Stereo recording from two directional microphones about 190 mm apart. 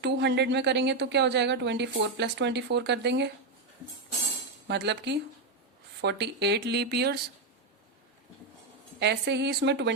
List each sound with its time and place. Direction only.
0.0 s speech: 60° right (ahead or behind)
4.7 s speech: 65° right (ahead or behind)
9.0 s speech: 65° right (ahead or behind)